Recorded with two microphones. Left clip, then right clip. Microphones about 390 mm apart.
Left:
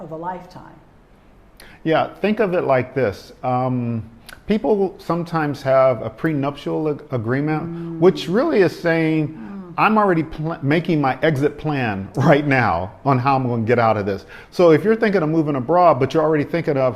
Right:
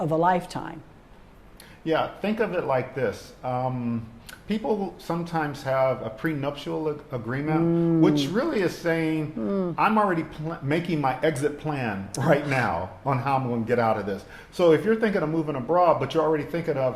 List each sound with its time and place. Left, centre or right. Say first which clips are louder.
0.1 s speech: right 6 dB; right
1.8 s speech: left 7 dB; left